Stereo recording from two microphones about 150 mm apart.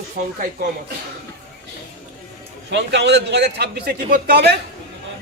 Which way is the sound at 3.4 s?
90° right.